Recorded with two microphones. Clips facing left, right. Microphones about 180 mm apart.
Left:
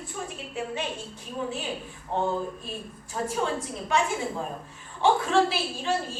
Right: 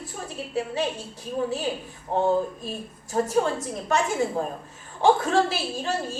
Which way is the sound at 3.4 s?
40° right (ahead or behind).